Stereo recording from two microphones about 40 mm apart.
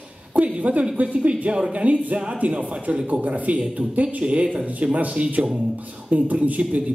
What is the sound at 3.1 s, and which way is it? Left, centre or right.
Speech, right.